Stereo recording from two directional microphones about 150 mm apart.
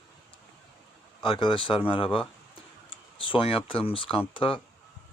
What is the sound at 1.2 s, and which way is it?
Speech, 35° left (ahead or behind).